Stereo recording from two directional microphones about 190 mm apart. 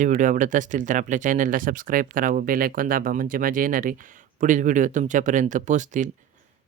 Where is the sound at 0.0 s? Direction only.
40° right (ahead or behind).